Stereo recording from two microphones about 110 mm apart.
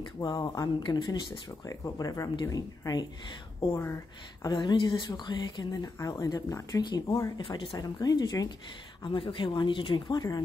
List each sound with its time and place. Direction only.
0.2 s speech: 40° left (ahead or behind)
1.7 s speech: 35° left (ahead or behind)
3.6 s speech: 55° left (ahead or behind)
4.4 s speech: 45° left (ahead or behind)
7.3 s speech: 45° left (ahead or behind)
9.0 s speech: 50° left (ahead or behind)